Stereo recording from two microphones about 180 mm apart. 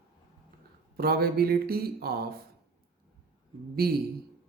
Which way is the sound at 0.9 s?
60° right (ahead or behind).